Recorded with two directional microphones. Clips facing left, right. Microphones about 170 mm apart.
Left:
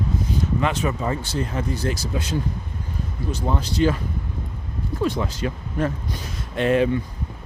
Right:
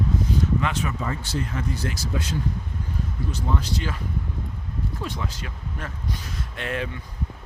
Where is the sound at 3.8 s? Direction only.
30° left (ahead or behind).